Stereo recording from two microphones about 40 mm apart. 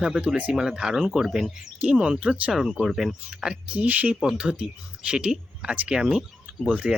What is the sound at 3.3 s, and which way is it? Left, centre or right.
Speech, right.